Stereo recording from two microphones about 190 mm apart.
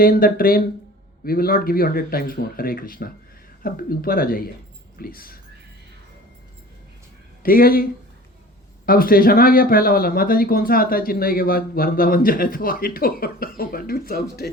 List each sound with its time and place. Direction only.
0.0 s speech: 50° left (ahead or behind)
7.4 s speech: 50° left (ahead or behind)
8.9 s speech: 50° left (ahead or behind)